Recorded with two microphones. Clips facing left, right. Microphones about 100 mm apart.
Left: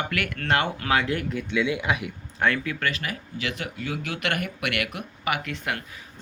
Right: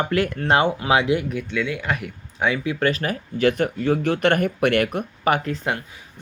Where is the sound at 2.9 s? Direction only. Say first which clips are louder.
Right 7 dB; 40° right (ahead or behind).